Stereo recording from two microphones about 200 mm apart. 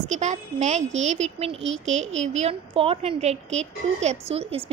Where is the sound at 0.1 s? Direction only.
35° right (ahead or behind).